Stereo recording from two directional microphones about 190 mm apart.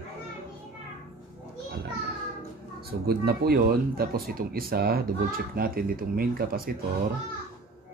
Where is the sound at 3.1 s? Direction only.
55° right (ahead or behind).